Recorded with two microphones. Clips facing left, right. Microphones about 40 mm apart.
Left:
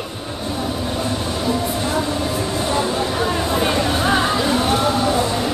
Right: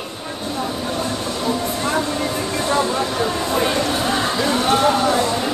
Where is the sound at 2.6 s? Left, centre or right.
Centre.